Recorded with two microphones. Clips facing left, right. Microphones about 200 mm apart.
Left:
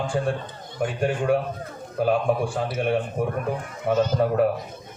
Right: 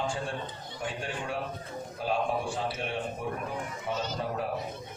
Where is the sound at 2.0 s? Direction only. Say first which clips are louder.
Left 9 dB; 55° left (ahead or behind).